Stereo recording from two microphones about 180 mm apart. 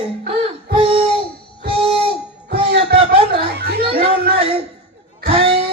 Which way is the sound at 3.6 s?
60° right (ahead or behind).